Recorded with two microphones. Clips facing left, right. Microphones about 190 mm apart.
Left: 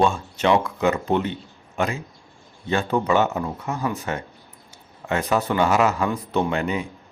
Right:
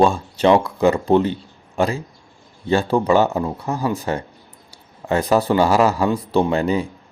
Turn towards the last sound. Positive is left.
turn(degrees=-35)  # may be behind; listen again after turning